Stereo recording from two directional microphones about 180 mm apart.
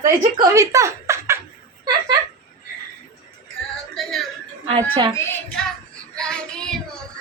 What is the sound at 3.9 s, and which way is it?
Music, centre (ahead or behind).